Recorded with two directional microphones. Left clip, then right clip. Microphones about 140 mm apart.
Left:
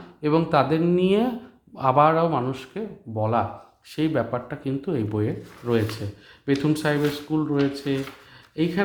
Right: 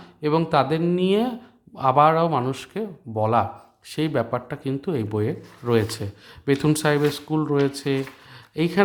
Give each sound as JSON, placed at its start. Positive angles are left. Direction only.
{"t": 0.2, "sound": "speech", "side_deg": -20}